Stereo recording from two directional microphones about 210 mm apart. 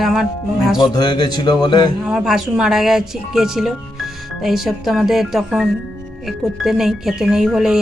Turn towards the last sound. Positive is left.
turn(degrees=-5)  # may be behind; listen again after turning